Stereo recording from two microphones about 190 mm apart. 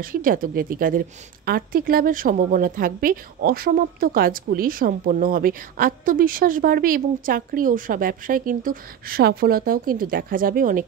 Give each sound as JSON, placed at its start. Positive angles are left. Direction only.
{"t": 0.0, "sound": "a woman's voice", "side_deg": -50}